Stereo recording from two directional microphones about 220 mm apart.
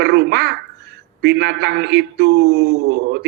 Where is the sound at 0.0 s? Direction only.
50° right (ahead or behind).